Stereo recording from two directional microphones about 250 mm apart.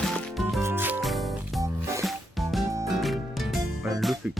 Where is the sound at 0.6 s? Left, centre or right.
Centre.